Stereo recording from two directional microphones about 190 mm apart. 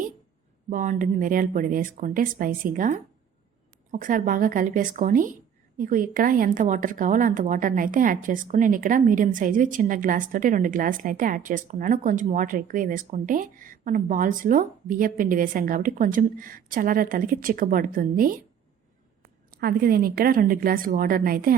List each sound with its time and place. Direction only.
0.7 s a woman's voice: 45° right (ahead or behind)
19.5 s a woman's voice: 55° right (ahead or behind)